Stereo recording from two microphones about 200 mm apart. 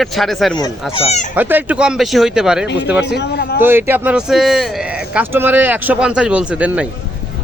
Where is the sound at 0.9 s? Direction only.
30° left (ahead or behind).